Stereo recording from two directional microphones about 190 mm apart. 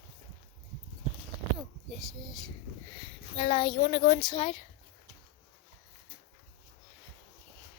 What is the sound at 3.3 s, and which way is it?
A child's voice, 30° left (ahead or behind).